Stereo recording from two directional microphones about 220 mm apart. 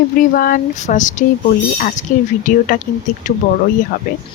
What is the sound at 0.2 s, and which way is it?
Speech, 40° left (ahead or behind).